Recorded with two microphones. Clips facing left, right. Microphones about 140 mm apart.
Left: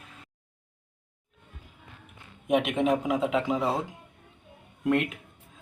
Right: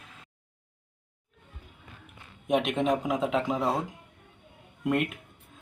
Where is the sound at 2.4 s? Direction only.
5° left (ahead or behind).